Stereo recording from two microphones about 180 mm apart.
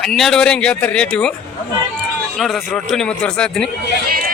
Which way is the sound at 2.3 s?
Centre (ahead or behind).